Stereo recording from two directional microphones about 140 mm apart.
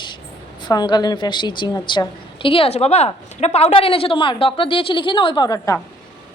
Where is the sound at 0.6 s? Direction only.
30° left (ahead or behind).